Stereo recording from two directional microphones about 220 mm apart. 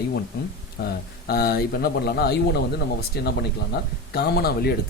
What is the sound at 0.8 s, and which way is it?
Speech, 50° left (ahead or behind).